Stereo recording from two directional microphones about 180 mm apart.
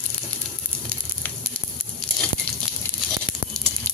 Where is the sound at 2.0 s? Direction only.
Centre (ahead or behind).